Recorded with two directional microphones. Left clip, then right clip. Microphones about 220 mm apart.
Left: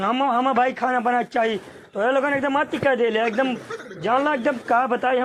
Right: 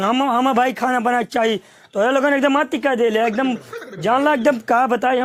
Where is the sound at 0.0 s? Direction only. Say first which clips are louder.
Right 3 dB; 60° right (ahead or behind).